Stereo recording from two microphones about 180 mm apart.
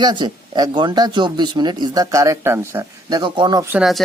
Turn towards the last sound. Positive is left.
turn(degrees=0)  # may be behind; listen again after turning